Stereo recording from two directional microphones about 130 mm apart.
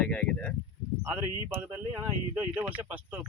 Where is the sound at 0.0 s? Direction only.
10° left (ahead or behind).